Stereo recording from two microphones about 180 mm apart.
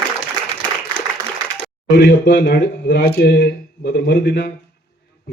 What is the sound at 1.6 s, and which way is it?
A man's voice, 75° left (ahead or behind).